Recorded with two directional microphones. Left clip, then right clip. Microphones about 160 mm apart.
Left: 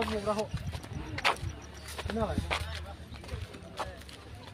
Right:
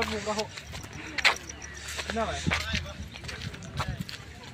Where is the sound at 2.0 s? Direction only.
5° left (ahead or behind).